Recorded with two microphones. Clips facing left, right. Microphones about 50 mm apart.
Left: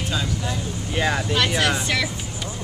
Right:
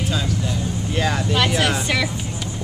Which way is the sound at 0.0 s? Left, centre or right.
Centre.